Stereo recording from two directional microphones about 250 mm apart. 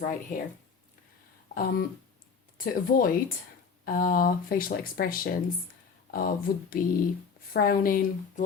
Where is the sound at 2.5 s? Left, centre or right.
Left.